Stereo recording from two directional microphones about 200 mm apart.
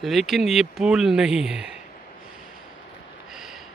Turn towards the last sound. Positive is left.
turn(degrees=0)  # may be behind; listen again after turning